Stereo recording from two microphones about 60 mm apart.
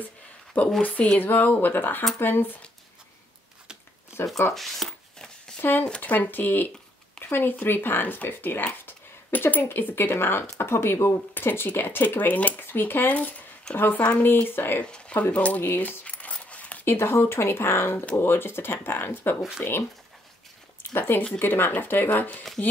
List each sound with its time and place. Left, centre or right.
0.5 s speech: left
4.6 s speech: centre
5.6 s speech: left
5.9 s speech: left
14.8 s speech: centre
15.6 s speech: left
16.0 s a sound: left
16.8 s speech: left
20.9 s speech: left